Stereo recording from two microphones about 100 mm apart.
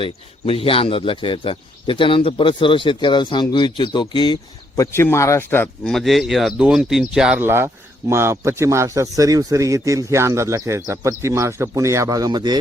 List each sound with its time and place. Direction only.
0.0 s speech: 70° left (ahead or behind); by 4.4 s 50° left (ahead or behind)
4.8 s speech: 25° left (ahead or behind)
5.9 s speech: centre (ahead or behind)
7.3 s a man's voice: 25° right (ahead or behind); by 12.5 s 45° right (ahead or behind)